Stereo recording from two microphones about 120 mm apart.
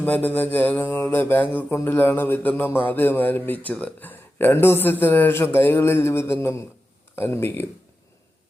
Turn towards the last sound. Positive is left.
turn(degrees=15)  # may be behind; listen again after turning